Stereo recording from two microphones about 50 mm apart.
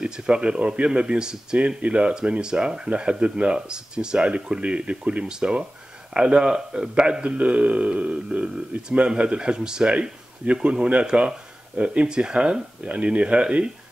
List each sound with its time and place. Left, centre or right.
0.0 s speech: right